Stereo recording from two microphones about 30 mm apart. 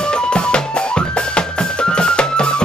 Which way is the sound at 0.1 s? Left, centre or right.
Left.